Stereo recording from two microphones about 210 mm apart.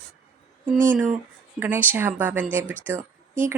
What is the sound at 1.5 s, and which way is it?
Speech, 10° right (ahead or behind).